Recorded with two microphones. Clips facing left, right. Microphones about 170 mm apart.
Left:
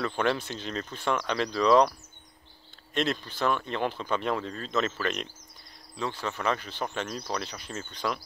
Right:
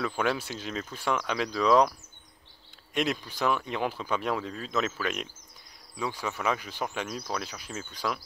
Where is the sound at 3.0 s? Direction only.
10° right (ahead or behind).